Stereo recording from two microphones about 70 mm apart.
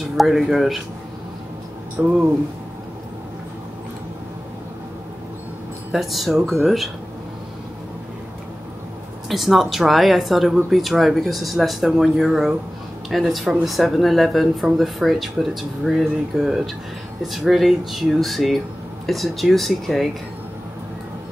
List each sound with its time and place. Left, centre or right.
0.0 s speech: centre
2.0 s speech: centre
5.9 s speech: centre
9.3 s speech: centre